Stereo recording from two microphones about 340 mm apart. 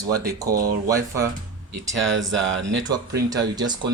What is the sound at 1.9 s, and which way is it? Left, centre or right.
Speech, right.